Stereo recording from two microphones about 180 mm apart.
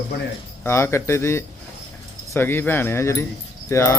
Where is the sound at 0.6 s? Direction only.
15° left (ahead or behind).